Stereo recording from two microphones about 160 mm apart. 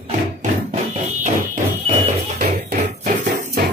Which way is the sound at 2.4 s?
60° right (ahead or behind).